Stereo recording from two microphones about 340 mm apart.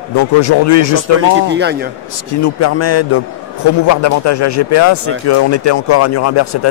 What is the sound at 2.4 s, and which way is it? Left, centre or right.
A man's voice, left.